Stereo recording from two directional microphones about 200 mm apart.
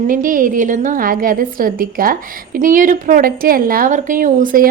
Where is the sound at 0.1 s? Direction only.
45° right (ahead or behind).